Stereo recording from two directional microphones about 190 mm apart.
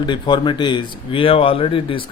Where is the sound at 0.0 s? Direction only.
25° left (ahead or behind).